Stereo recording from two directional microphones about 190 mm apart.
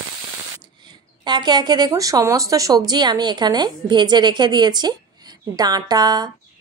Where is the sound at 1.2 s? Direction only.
25° right (ahead or behind).